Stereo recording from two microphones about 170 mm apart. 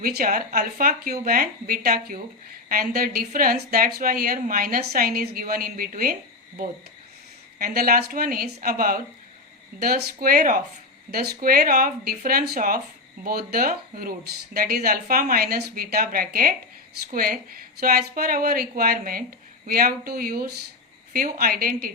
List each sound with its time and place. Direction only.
0.0 s a woman's voice: 60° right (ahead or behind)
7.6 s a woman's voice: 60° right (ahead or behind)